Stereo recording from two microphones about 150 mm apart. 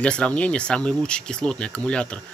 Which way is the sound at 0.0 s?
5° left (ahead or behind).